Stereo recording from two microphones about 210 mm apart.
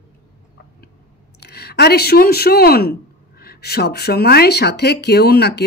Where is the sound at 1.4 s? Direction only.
50° left (ahead or behind).